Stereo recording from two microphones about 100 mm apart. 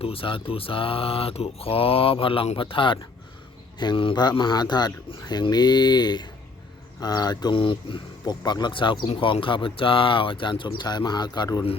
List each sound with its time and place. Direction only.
0.0 s speech: 65° left (ahead or behind); by 7.5 s 45° left (ahead or behind)
7.5 s speech: 60° left (ahead or behind)